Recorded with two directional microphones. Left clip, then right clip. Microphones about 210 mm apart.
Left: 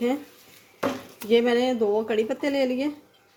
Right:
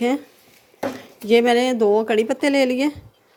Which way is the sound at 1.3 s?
35° right (ahead or behind).